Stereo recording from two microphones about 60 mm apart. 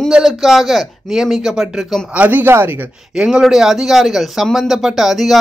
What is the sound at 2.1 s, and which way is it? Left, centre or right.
Speech, right.